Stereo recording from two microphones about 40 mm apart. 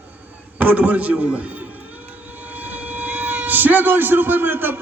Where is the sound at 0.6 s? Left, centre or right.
Right.